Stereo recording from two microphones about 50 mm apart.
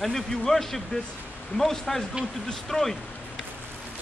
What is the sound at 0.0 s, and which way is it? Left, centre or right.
Speech, centre.